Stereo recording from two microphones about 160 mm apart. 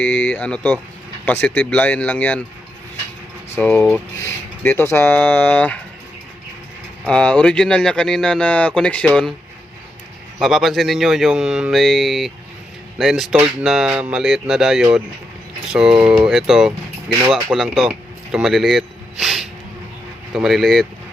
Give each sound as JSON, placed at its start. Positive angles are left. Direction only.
{"t": 0.0, "sound": "speech", "side_deg": 10}
{"t": 3.5, "sound": "speech", "side_deg": 10}
{"t": 7.0, "sound": "speech", "side_deg": 5}
{"t": 10.4, "sound": "speech", "side_deg": 0}